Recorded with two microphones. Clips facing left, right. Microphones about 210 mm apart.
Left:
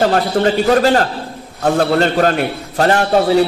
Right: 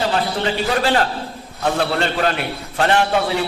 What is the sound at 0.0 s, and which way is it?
A man's voice, 50° left (ahead or behind).